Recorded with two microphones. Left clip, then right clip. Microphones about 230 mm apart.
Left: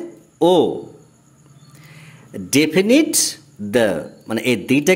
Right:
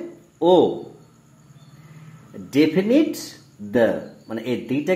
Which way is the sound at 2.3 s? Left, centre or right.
Left.